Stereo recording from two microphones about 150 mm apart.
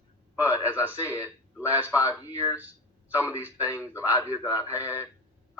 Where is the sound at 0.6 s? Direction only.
15° left (ahead or behind).